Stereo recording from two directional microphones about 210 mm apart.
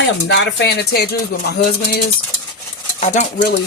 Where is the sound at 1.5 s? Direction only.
50° left (ahead or behind).